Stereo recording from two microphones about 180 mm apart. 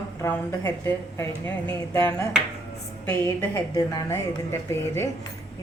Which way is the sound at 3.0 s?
10° left (ahead or behind).